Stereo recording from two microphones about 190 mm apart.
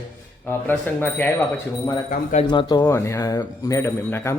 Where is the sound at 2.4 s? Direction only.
20° left (ahead or behind).